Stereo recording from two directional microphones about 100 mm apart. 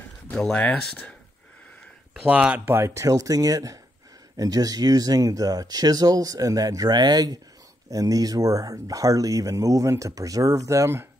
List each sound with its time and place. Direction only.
0.4 s speech: 10° left (ahead or behind)
2.2 s speech: 15° right (ahead or behind)